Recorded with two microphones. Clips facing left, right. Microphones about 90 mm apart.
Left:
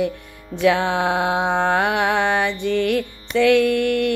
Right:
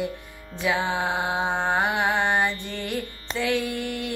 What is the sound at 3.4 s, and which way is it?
Music, 75° left (ahead or behind).